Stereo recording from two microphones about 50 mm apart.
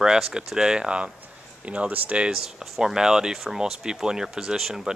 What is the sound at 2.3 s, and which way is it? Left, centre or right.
Speech, centre.